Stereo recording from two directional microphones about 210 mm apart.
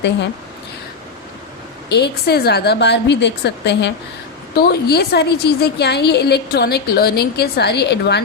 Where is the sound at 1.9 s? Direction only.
50° left (ahead or behind).